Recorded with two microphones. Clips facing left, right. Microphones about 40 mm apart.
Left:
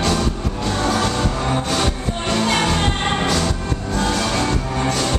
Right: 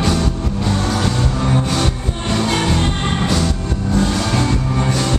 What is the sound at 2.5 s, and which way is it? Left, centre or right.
Music, centre.